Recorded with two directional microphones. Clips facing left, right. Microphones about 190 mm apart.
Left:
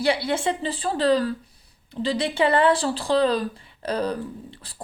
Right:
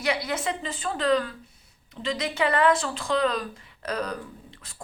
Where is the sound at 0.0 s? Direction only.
30° left (ahead or behind).